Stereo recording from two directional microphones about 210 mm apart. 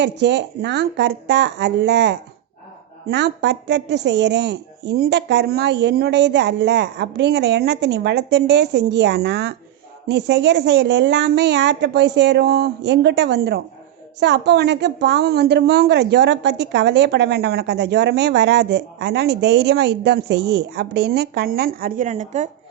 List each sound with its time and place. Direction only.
0.0 s a woman's voice: 55° right (ahead or behind); by 22.4 s 35° right (ahead or behind)